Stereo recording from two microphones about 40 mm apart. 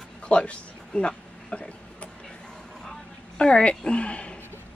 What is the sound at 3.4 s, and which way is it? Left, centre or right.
Speech, left.